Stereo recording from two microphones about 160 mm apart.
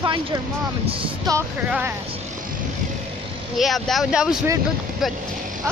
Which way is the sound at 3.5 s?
Centre (ahead or behind).